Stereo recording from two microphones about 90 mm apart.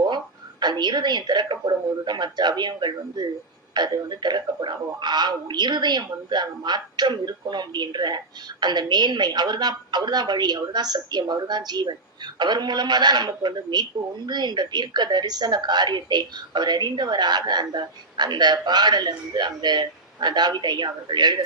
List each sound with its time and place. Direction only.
0.6 s a woman's voice: 55° right (ahead or behind)